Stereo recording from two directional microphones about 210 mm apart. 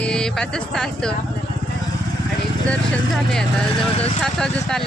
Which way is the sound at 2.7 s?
Centre (ahead or behind).